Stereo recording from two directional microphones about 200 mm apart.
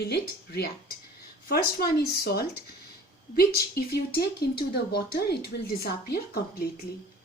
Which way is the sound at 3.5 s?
50° left (ahead or behind).